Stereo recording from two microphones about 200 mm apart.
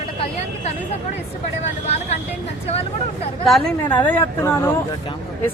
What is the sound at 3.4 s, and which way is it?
A woman's voice, centre (ahead or behind).